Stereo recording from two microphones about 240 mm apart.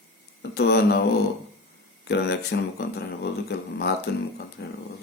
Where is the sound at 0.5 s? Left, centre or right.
Left.